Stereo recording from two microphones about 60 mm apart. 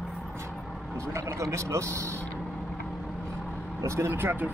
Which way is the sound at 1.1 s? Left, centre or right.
Right.